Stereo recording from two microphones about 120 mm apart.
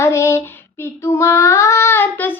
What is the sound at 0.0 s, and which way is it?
Female singing, 25° left (ahead or behind).